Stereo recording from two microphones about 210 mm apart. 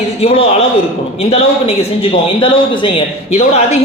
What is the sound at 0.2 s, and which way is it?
A man's voice, 30° left (ahead or behind).